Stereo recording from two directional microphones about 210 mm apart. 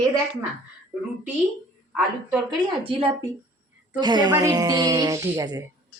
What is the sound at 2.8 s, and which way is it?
Speech, 25° right (ahead or behind).